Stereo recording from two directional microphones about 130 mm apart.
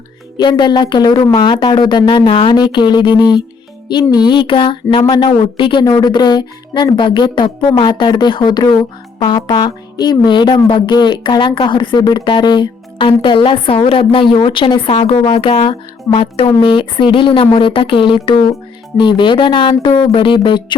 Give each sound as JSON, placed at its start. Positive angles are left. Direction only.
{"t": 0.3, "sound": "speech", "side_deg": 35}